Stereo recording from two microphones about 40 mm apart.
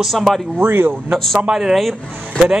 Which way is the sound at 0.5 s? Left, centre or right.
Right.